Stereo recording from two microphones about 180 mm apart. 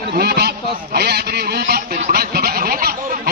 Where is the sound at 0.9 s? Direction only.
65° right (ahead or behind).